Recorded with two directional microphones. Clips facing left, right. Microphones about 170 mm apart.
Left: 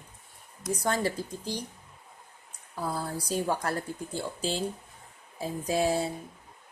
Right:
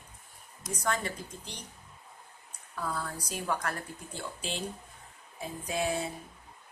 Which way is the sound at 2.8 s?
30° left (ahead or behind).